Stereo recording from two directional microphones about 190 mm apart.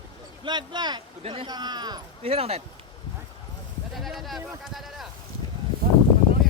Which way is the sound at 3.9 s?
Centre (ahead or behind).